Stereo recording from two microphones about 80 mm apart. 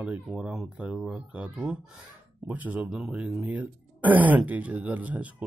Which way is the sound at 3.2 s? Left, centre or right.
Centre.